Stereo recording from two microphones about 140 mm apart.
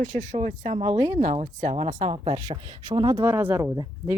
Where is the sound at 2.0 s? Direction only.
40° right (ahead or behind).